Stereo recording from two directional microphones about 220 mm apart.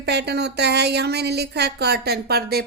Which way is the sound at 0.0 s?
50° right (ahead or behind).